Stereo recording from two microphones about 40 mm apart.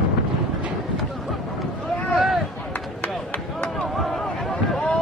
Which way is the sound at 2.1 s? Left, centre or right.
Centre.